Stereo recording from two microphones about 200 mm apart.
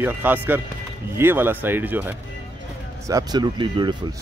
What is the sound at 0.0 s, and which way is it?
Speech, 10° right (ahead or behind).